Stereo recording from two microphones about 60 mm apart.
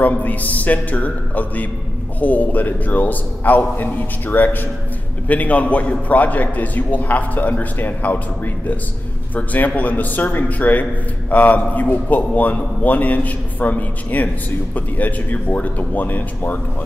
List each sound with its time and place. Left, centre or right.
0.0 s a man's voice: left
9.3 s a man's voice: left